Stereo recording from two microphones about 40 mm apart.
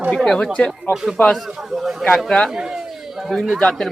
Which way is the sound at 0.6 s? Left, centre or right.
Left.